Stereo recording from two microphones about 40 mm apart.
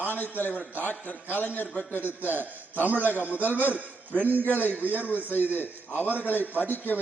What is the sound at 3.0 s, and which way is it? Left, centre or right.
Speech, left.